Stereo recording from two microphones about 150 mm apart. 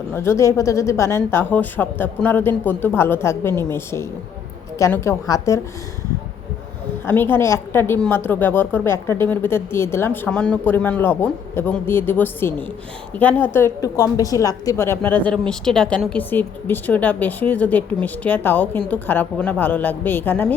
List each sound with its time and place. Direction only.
0.1 s a woman's voice: 15° left (ahead or behind)
7.0 s a woman's voice: 15° left (ahead or behind)
15.3 s a woman's voice: 5° left (ahead or behind)